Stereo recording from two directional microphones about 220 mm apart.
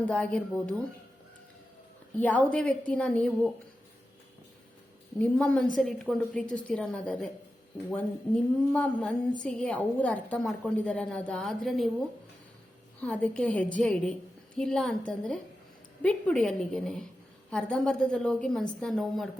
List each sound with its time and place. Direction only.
0.0 s a woman's voice: 5° left (ahead or behind)
2.1 s a woman's voice: 5° left (ahead or behind)
5.2 s a woman's voice: 5° left (ahead or behind)
8.7 s a woman's voice: 5° left (ahead or behind)